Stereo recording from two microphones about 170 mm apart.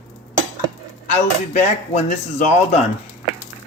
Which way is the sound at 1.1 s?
50° left (ahead or behind).